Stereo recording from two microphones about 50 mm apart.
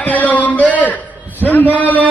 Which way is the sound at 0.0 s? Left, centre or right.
Left.